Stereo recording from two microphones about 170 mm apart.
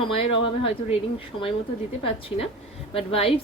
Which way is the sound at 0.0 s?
35° left (ahead or behind).